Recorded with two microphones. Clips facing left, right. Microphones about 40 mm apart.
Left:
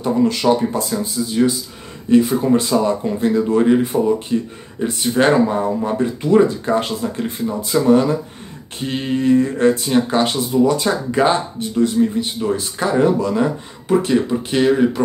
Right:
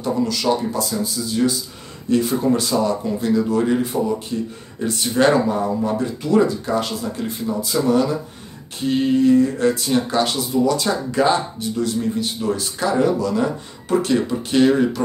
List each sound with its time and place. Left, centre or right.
0.0 s speech: left
4.7 s speech: centre
13.8 s speech: centre